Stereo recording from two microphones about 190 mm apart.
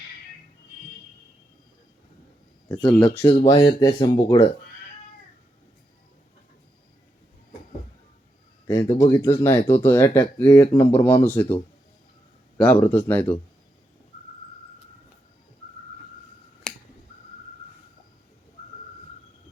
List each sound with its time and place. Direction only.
2.8 s speech: 10° left (ahead or behind)
3.4 s speech: 20° left (ahead or behind)
8.6 s speech: 15° left (ahead or behind)
12.5 s speech: 10° left (ahead or behind)